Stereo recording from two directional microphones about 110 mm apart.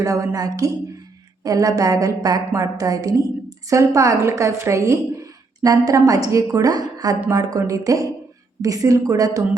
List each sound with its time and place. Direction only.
0.0 s a woman's voice: 30° right (ahead or behind)